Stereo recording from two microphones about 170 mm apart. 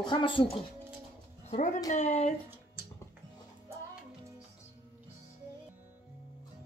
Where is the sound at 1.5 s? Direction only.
45° left (ahead or behind).